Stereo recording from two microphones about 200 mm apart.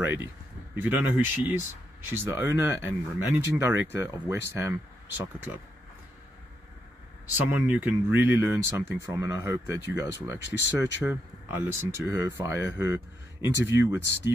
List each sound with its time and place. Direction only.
0.0 s speech: 10° right (ahead or behind)
7.4 s speech: 10° right (ahead or behind)